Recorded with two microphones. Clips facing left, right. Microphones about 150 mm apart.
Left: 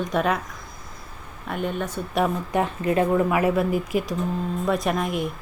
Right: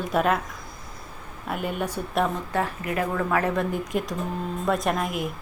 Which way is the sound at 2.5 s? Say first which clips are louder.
Left 4 dB; 20° left (ahead or behind).